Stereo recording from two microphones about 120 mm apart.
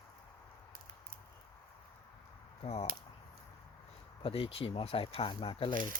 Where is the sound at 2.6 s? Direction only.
55° left (ahead or behind).